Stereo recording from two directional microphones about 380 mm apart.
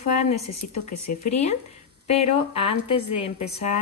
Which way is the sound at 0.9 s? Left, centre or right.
Left.